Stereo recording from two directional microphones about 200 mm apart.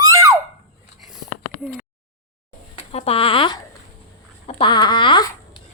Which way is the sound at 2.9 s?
30° left (ahead or behind).